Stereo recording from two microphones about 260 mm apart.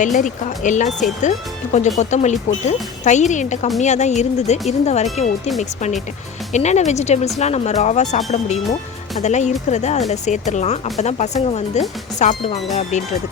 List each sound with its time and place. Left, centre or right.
0.0 s speech: left
6.5 s speech: left